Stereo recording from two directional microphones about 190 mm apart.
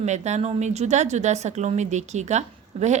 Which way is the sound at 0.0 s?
35° right (ahead or behind).